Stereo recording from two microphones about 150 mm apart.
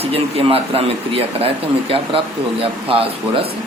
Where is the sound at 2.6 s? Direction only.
40° right (ahead or behind).